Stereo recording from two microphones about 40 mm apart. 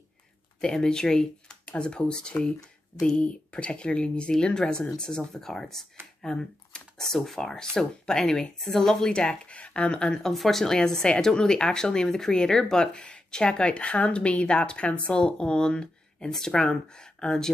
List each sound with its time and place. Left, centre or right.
0.6 s speech: centre
6.2 s speech: centre
7.0 s speech: centre
9.2 s speech: left
10.2 s speech: centre